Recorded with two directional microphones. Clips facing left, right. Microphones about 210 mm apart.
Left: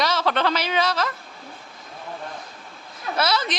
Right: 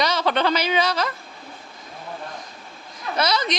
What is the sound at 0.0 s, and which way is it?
A woman's voice, centre (ahead or behind).